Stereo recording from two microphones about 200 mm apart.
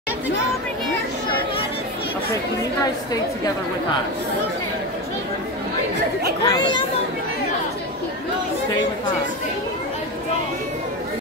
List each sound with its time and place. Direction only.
6.4 s speech: 20° left (ahead or behind)